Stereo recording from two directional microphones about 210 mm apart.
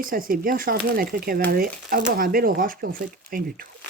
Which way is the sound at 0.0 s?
40° right (ahead or behind).